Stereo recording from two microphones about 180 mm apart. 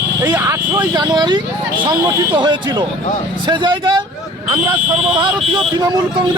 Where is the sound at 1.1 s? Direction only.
25° right (ahead or behind).